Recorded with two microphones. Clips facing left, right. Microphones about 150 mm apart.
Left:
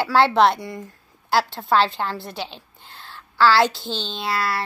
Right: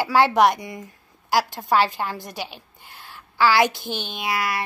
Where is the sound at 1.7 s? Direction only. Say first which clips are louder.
Left 1 dB; 10° right (ahead or behind).